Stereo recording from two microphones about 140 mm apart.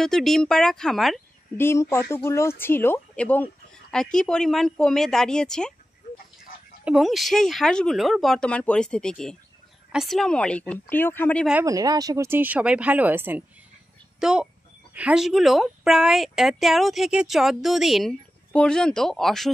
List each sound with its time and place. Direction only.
0.0 s speech: 5° left (ahead or behind)
1.6 s a woman's voice: 20° left (ahead or behind)
6.8 s a woman's voice: 5° right (ahead or behind); by 11.4 s 15° left (ahead or behind)
11.6 s speech: 25° right (ahead or behind); by 19.5 s centre (ahead or behind)